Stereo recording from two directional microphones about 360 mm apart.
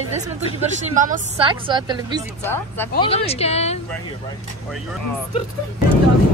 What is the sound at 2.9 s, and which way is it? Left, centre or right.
Speech, centre.